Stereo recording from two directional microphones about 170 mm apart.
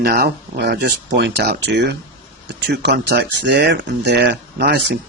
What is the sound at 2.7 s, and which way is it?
Speech, 80° right.